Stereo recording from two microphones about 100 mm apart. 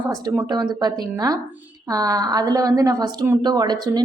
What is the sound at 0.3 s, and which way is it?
A woman's voice, 40° right (ahead or behind).